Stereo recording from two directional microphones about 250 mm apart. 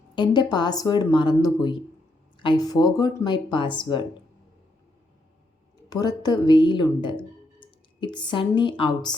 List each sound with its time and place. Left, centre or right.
0.2 s speech: centre
5.9 s speech: centre